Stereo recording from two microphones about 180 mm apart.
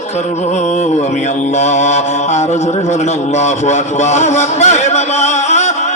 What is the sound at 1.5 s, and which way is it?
Mantra, 40° left (ahead or behind).